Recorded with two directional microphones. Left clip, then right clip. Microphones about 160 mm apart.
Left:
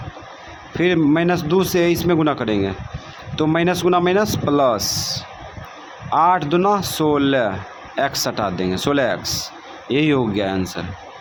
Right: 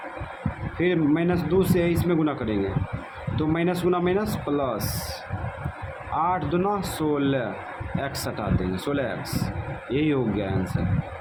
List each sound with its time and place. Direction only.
0.8 s speech: 35° left (ahead or behind)